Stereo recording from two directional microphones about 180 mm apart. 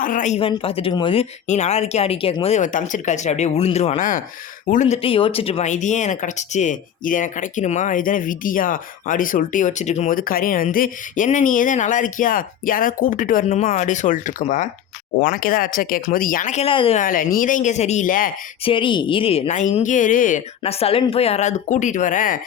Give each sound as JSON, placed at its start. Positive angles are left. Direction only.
{"t": 0.0, "sound": "speech", "side_deg": 45}
{"t": 0.3, "sound": "speech", "side_deg": 30}
{"t": 5.0, "sound": "speech", "side_deg": 30}
{"t": 17.0, "sound": "speech", "side_deg": 50}
{"t": 18.6, "sound": "speech", "side_deg": 30}